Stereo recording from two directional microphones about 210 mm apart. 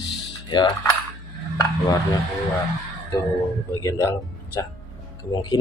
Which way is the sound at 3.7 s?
15° left (ahead or behind).